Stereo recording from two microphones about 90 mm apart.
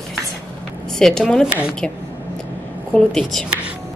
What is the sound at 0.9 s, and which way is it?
Speech, 5° left (ahead or behind).